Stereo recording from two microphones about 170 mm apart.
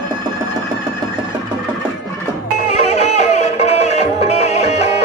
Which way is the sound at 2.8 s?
40° left (ahead or behind).